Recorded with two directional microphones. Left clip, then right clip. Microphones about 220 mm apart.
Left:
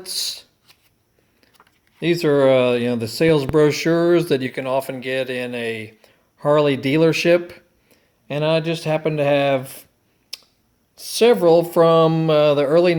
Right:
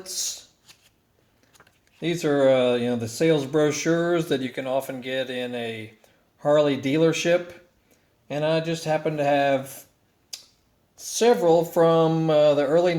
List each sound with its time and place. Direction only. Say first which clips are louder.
2.0 s speech: left 5 dB; 45° left (ahead or behind)
11.2 s speech: left 5 dB; 40° left (ahead or behind)